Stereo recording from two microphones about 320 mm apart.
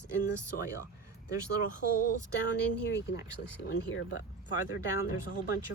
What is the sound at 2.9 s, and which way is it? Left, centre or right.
Speech, left.